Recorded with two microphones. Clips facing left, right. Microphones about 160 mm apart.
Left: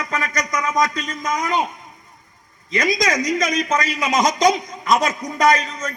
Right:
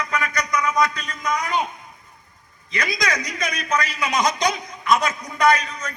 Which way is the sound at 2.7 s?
40° left (ahead or behind).